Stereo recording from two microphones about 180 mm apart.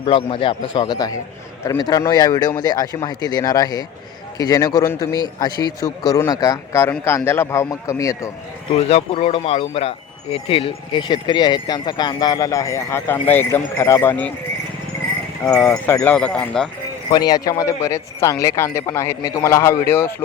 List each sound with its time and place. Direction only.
0.0 s speech: 30° left (ahead or behind)
8.7 s speech: 35° left (ahead or behind); by 14.3 s 10° left (ahead or behind)
15.4 s speech: 20° left (ahead or behind)
16.0 s speech: 5° left (ahead or behind)
17.1 s speech: 20° left (ahead or behind)